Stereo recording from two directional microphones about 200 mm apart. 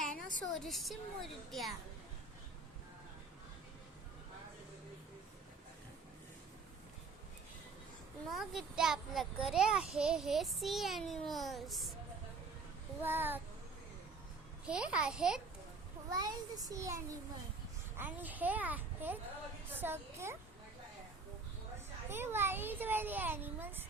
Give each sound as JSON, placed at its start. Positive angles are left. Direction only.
{"t": 0.0, "sound": "a sound", "side_deg": 0}
{"t": 0.5, "sound": "a child's voice", "side_deg": 0}
{"t": 8.3, "sound": "a child's voice", "side_deg": 0}
{"t": 13.0, "sound": "a child's voice", "side_deg": -10}
{"t": 14.7, "sound": "a child's voice", "side_deg": -5}
{"t": 16.0, "sound": "a child's voice", "side_deg": -20}
{"t": 22.1, "sound": "a child's voice", "side_deg": -10}